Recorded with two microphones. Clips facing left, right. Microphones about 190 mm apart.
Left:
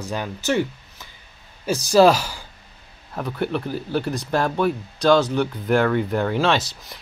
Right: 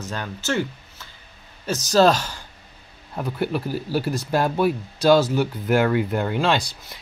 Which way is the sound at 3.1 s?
5° right (ahead or behind).